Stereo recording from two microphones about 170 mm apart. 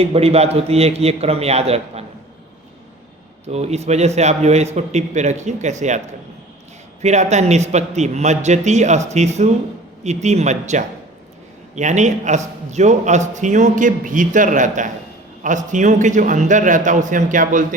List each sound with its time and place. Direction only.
0.0 s a man's voice: 35° right (ahead or behind)
3.4 s a man's voice: 40° right (ahead or behind)
7.0 s a man's voice: 40° right (ahead or behind)